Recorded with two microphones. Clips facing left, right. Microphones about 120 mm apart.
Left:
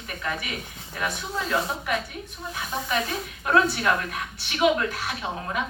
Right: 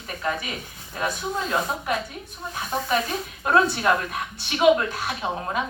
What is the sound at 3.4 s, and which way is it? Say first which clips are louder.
A woman's voice: right 1 dB; 30° right (ahead or behind).